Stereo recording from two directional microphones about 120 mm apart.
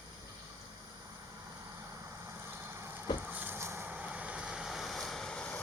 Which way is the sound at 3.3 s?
15° right (ahead or behind).